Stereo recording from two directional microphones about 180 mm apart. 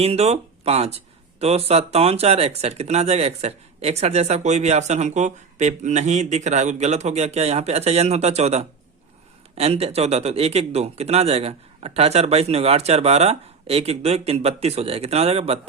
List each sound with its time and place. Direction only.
0.0 s speech: 35° right (ahead or behind)